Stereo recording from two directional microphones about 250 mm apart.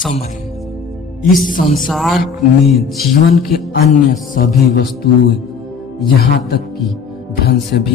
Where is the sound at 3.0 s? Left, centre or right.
Left.